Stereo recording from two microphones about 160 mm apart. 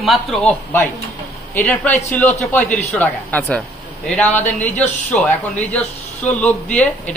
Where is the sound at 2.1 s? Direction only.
10° left (ahead or behind).